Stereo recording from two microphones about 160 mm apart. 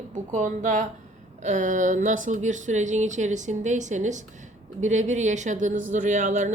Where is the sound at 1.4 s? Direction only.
50° right (ahead or behind).